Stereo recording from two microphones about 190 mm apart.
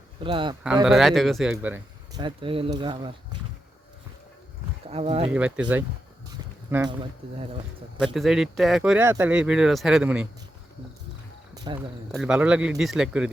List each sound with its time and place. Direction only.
0.2 s speech: 25° right (ahead or behind)
0.9 s speech: centre (ahead or behind)
2.1 s speech: 25° right (ahead or behind)
4.9 s speech: 30° right (ahead or behind)
5.3 s speech: 5° right (ahead or behind)
6.3 s a sound: 15° right (ahead or behind)
8.0 s speech: centre (ahead or behind)
11.5 s cricket: 20° right (ahead or behind)
12.1 s speech: 5° right (ahead or behind)